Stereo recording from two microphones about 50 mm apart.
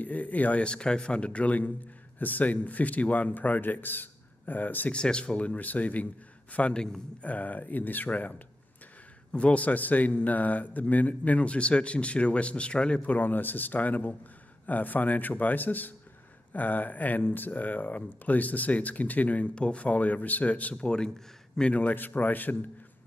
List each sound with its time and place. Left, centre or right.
0.0 s speech: left
4.9 s speech: centre
13.0 s speech: left
20.8 s speech: centre
21.5 s speech: left